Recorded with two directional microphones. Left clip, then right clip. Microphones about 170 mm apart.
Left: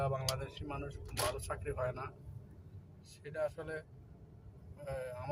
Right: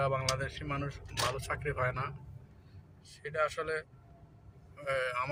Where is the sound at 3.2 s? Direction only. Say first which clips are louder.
Right 6 dB; 15° left (ahead or behind).